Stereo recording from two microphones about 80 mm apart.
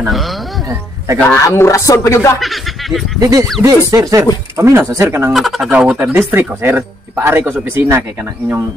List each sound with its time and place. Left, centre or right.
0.1 s speech: centre
0.7 s speech: right
1.3 s speech: left
2.4 s speech: centre
3.2 s speech: right
5.3 s speech: centre
5.7 s speech: centre